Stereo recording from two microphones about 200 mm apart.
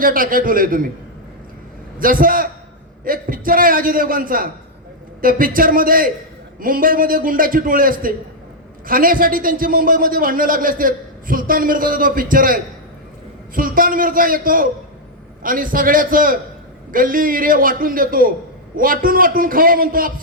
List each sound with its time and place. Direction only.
0.0 s a man's voice: 45° right (ahead or behind)
2.0 s a man's voice: 45° right (ahead or behind)